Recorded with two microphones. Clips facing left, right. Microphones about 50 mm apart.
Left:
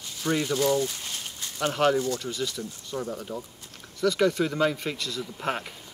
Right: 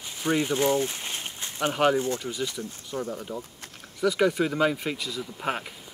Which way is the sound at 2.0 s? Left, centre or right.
Right.